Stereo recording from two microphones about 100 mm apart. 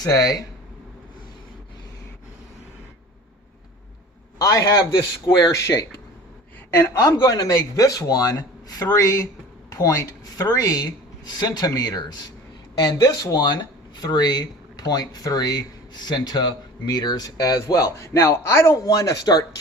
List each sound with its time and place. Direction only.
0.0 s speech: 40° left (ahead or behind)
4.4 s speech: 35° left (ahead or behind)